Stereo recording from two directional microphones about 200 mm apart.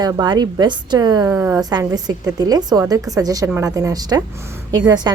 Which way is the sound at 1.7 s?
20° right (ahead or behind).